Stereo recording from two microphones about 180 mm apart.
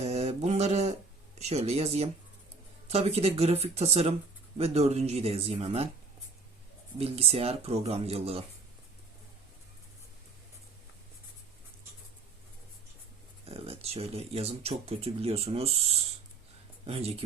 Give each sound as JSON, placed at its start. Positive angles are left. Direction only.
{"t": 0.0, "sound": "a sound", "side_deg": -35}
{"t": 1.4, "sound": "speech", "side_deg": -35}
{"t": 7.0, "sound": "speech", "side_deg": -35}
{"t": 13.4, "sound": "speech", "side_deg": -35}